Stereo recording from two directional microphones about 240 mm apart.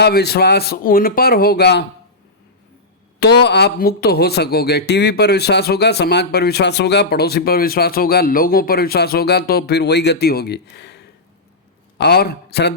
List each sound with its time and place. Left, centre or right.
0.0 s speech: left
3.2 s a man's voice: left